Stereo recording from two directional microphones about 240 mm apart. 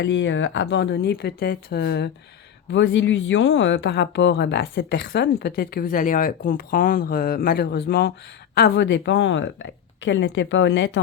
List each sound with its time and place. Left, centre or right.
0.0 s speech: left